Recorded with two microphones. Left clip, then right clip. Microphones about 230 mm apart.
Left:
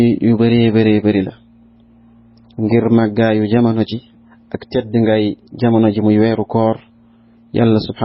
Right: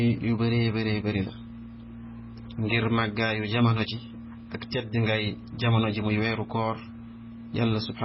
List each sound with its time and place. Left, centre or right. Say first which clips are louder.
0.0 s speech: left 14 dB; left
2.6 s speech: left 12 dB; left